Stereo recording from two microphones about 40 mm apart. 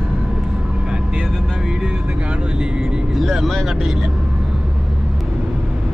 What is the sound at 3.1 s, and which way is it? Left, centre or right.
Speech, centre.